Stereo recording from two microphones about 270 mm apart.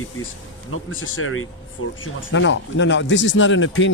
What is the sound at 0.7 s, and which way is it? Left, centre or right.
Speech, left.